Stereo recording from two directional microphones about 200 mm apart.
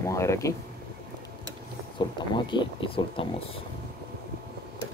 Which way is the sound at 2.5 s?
25° left (ahead or behind).